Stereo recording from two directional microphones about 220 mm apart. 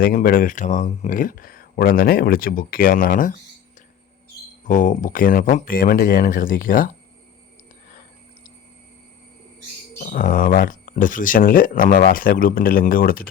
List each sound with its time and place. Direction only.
0.0 s speech: 40° left (ahead or behind)
4.7 s speech: 35° left (ahead or behind)
10.0 s speech: 35° left (ahead or behind)